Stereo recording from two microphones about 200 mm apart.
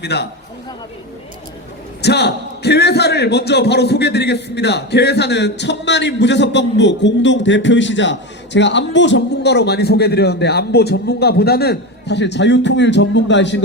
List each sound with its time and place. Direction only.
0.0 s a man's voice: 55° left (ahead or behind)
2.0 s a man's voice: 55° left (ahead or behind)